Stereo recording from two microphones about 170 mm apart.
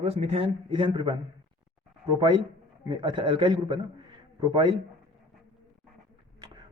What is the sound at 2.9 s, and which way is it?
Speech, 25° right (ahead or behind).